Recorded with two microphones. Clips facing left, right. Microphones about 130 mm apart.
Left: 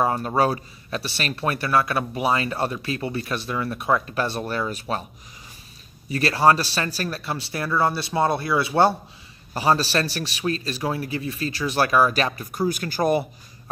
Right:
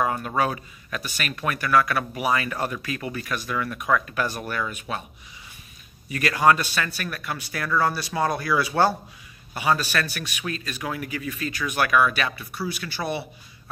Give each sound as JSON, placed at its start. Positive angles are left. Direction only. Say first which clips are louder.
{"t": 0.0, "sound": "speech", "louder": "left 3 dB", "side_deg": 30}
{"t": 6.0, "sound": "speech", "louder": "left 2 dB", "side_deg": 30}
{"t": 9.5, "sound": "a man's voice", "louder": "left 3 dB", "side_deg": 35}